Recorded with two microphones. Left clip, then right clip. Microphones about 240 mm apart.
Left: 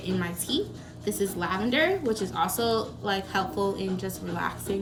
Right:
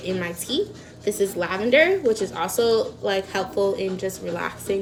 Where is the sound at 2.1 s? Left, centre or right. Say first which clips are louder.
Right 4 dB; left.